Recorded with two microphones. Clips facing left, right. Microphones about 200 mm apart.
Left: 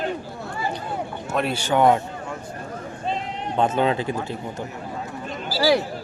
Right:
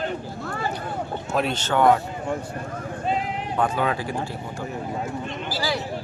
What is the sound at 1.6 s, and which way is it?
Speech, 15° left (ahead or behind).